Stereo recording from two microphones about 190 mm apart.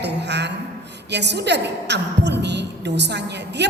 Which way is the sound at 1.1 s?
65° right (ahead or behind).